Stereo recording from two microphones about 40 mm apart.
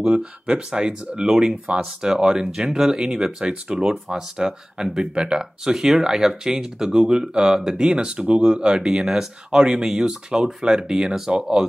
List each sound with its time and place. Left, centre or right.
0.0 s speech: right